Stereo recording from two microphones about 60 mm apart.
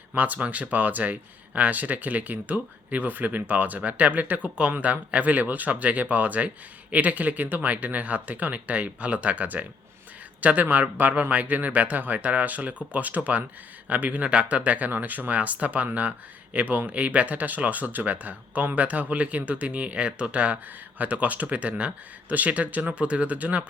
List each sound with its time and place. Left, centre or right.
0.1 s speech: right